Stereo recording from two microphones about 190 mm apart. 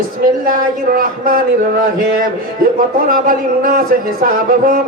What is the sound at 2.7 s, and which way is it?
Speech, 50° right (ahead or behind).